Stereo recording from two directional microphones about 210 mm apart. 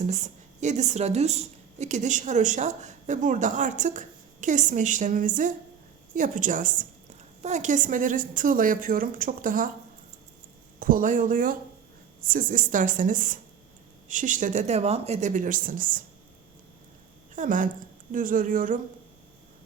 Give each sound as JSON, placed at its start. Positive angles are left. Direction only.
{"t": 0.0, "sound": "a woman's voice", "side_deg": -35}
{"t": 10.8, "sound": "a woman's voice", "side_deg": -40}
{"t": 17.3, "sound": "a woman's voice", "side_deg": -40}